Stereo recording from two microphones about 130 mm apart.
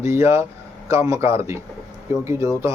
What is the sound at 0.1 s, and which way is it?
Speech, 20° right (ahead or behind).